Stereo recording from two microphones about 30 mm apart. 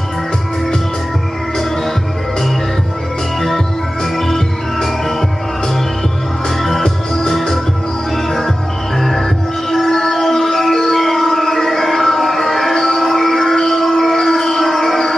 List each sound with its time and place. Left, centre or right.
3.3 s music: centre
7.2 s music: centre
8.9 s music: centre